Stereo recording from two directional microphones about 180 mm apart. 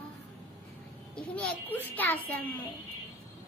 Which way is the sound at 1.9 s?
10° left (ahead or behind).